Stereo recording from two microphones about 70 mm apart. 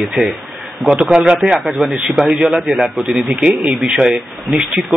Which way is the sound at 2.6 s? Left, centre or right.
Centre.